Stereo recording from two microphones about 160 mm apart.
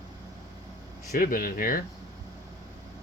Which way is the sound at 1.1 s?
65° left (ahead or behind).